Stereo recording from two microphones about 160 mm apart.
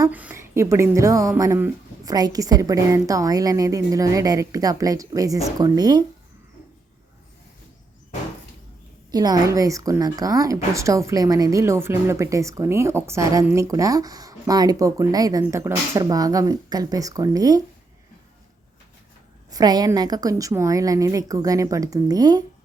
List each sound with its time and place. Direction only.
0.1 s a woman's voice: 10° right (ahead or behind)
9.1 s a woman's voice: 25° right (ahead or behind)
19.5 s a woman's voice: 25° right (ahead or behind)